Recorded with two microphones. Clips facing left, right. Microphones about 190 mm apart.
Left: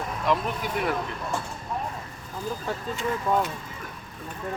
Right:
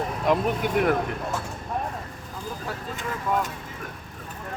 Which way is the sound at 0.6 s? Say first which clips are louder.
Right 6 dB; 55° right (ahead or behind).